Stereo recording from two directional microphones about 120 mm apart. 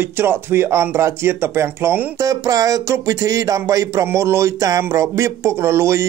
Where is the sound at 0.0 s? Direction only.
20° right (ahead or behind).